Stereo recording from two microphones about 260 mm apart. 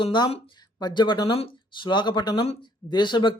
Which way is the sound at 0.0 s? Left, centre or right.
Centre.